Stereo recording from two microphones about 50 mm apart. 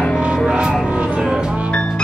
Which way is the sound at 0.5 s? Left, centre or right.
Centre.